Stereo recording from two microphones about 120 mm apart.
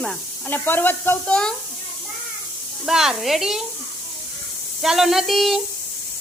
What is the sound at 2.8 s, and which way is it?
Speech, 5° right (ahead or behind).